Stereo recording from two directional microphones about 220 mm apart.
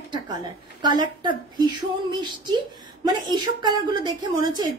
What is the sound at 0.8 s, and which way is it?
Speech, 20° right (ahead or behind).